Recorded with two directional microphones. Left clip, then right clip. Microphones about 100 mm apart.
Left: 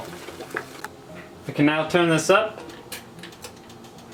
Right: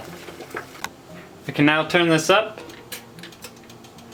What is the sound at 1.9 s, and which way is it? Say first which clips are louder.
Speech: right 1 dB; 30° right (ahead or behind).